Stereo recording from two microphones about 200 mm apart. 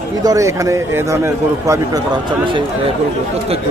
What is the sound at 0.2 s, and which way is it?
A man's voice, 15° right (ahead or behind).